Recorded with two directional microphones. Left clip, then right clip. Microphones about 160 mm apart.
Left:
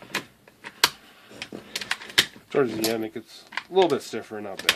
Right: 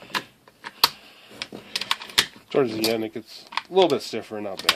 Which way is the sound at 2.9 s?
35° right (ahead or behind).